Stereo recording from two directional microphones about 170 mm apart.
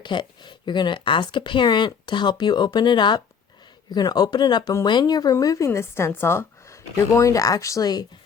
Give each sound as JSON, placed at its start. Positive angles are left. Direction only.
{"t": 0.0, "sound": "speech", "side_deg": 25}